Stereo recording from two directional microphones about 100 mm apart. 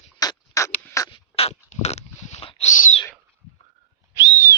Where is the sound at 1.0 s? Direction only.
65° left (ahead or behind).